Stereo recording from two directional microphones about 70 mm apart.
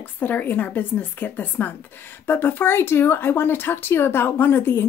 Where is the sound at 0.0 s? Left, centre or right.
Left.